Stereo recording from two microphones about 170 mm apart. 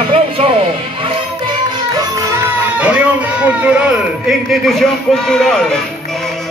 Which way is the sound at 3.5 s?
5° right (ahead or behind).